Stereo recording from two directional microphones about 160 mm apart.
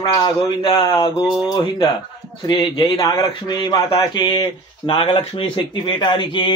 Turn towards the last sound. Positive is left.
turn(degrees=30)  # may be behind; listen again after turning